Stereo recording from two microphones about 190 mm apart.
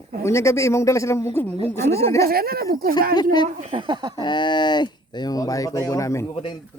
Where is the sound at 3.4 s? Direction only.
35° right (ahead or behind).